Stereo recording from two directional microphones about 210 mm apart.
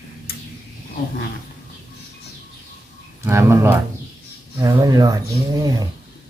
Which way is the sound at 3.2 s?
10° right (ahead or behind).